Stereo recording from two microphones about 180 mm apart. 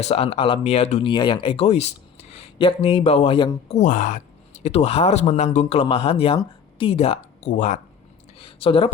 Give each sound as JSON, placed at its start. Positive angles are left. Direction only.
{"t": 0.0, "sound": "speech", "side_deg": 35}
{"t": 1.0, "sound": "speech", "side_deg": 25}
{"t": 3.7, "sound": "speech", "side_deg": 40}
{"t": 4.6, "sound": "speech", "side_deg": 35}
{"t": 7.5, "sound": "speech", "side_deg": 45}
{"t": 8.4, "sound": "a sound", "side_deg": 30}